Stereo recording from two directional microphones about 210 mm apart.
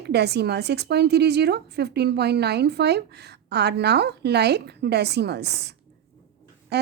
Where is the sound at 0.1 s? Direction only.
50° right (ahead or behind).